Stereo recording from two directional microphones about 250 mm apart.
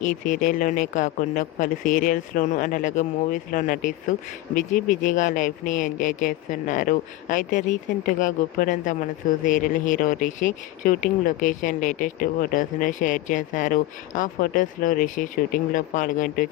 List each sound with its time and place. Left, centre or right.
0.3 s speech: left